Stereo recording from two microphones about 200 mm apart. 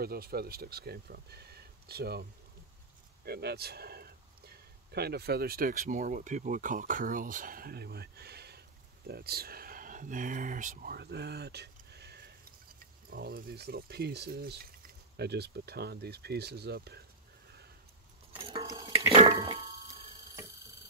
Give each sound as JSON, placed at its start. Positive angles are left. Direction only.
{"t": 0.0, "sound": "speech", "side_deg": -50}
{"t": 3.3, "sound": "speech", "side_deg": -50}
{"t": 18.4, "sound": "a sound", "side_deg": -20}